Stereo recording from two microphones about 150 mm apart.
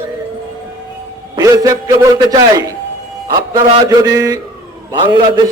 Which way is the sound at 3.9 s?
25° right (ahead or behind).